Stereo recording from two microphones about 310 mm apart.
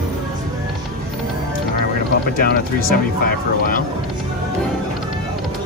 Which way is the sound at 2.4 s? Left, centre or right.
Left.